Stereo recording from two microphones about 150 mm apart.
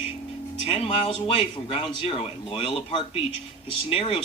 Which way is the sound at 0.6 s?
40° left (ahead or behind).